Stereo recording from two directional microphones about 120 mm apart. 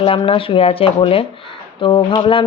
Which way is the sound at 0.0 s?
50° left (ahead or behind).